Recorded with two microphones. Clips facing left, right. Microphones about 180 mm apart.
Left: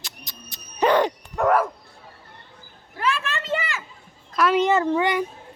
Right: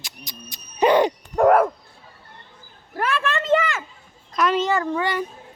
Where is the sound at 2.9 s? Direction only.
50° right (ahead or behind).